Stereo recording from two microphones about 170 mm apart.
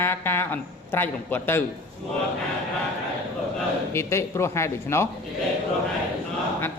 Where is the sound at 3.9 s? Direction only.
15° left (ahead or behind).